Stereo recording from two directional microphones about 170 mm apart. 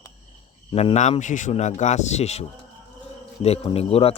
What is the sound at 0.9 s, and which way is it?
Speech, 45° left (ahead or behind).